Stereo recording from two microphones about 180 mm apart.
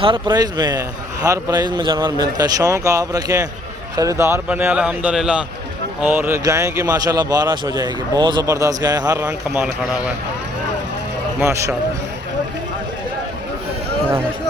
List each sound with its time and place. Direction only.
0.0 s a man's voice: 25° right (ahead or behind)
9.2 s a man's voice: 10° right (ahead or behind)
11.3 s a man's voice: 15° right (ahead or behind)